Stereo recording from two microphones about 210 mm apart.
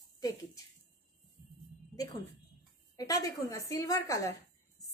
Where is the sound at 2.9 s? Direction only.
15° left (ahead or behind).